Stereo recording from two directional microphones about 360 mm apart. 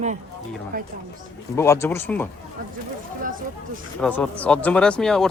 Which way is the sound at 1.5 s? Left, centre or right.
Centre.